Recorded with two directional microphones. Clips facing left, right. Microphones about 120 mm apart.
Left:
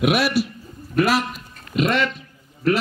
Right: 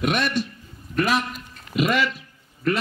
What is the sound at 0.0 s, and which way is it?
A man's voice, 5° left (ahead or behind).